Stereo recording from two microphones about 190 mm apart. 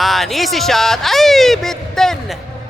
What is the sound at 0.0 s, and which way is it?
Speech, centre (ahead or behind).